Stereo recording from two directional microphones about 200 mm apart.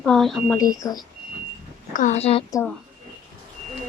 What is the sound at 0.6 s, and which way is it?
Speech, 20° left (ahead or behind).